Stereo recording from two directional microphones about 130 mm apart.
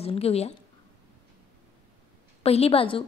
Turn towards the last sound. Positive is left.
turn(degrees=45)  # may be behind; listen again after turning